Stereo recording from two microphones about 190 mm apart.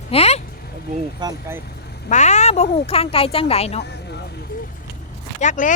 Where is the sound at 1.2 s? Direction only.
10° right (ahead or behind).